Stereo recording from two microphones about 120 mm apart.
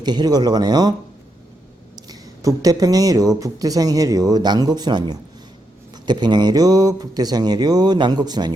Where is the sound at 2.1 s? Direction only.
30° right (ahead or behind).